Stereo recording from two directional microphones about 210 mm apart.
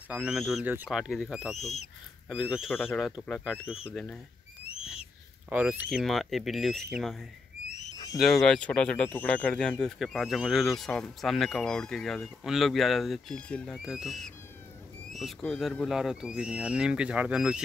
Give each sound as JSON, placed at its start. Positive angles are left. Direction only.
{"t": 0.1, "sound": "speech", "side_deg": -5}
{"t": 1.6, "sound": "speech", "side_deg": 30}
{"t": 2.2, "sound": "speech", "side_deg": -5}
{"t": 2.7, "sound": "speech", "side_deg": 10}
{"t": 5.5, "sound": "speech", "side_deg": -5}
{"t": 7.9, "sound": "a sound", "side_deg": 15}
{"t": 8.2, "sound": "speech", "side_deg": 0}